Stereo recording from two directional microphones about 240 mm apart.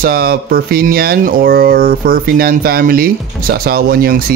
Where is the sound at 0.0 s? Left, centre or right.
Right.